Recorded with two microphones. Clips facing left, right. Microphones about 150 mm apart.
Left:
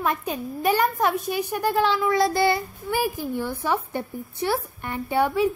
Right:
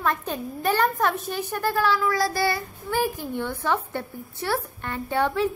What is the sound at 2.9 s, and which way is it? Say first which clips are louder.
A woman's voice: left 1 dB; 10° left (ahead or behind).